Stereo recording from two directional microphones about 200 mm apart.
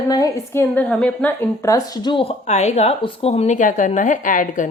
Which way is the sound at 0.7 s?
5° left (ahead or behind).